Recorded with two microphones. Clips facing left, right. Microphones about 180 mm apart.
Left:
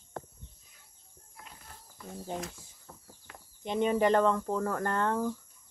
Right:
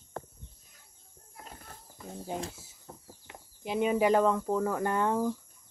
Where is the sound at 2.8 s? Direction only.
20° right (ahead or behind).